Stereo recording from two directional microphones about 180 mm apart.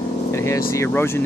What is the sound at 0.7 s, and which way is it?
Speech, 15° left (ahead or behind).